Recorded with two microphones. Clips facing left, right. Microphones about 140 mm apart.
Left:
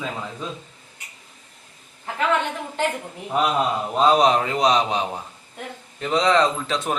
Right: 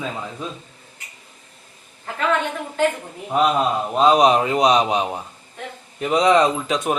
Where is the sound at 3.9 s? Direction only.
5° right (ahead or behind).